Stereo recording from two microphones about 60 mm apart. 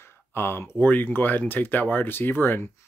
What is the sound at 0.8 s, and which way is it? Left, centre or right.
Speech, left.